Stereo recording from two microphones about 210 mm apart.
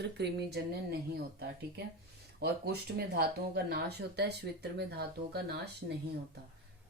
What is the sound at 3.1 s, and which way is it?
Speech, 45° right (ahead or behind).